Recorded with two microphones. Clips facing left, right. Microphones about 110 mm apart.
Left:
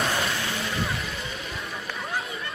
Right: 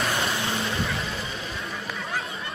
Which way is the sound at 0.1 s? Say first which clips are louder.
Right 1 dB; 25° right (ahead or behind).